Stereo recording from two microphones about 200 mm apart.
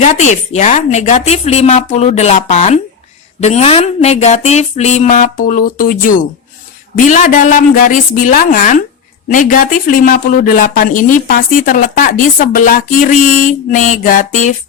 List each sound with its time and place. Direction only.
0.0 s speech: 35° left (ahead or behind)